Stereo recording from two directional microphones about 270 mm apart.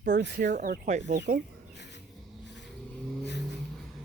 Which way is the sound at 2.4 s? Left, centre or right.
Left.